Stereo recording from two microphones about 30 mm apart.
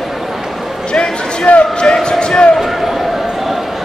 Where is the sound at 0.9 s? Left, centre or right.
Left.